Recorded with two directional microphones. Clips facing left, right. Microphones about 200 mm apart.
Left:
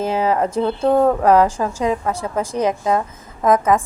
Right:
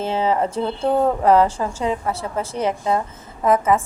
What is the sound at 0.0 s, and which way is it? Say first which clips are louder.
Speech: left 2 dB; 10° left (ahead or behind).